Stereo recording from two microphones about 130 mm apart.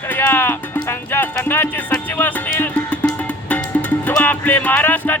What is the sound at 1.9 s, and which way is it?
Music, 15° left (ahead or behind).